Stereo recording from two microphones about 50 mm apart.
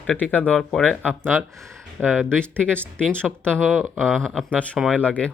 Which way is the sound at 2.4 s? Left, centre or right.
Left.